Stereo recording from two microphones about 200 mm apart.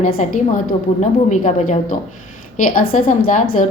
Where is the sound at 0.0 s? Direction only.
40° left (ahead or behind).